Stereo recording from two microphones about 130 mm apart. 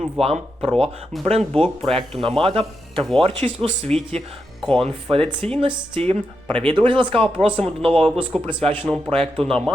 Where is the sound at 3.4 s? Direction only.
55° right (ahead or behind).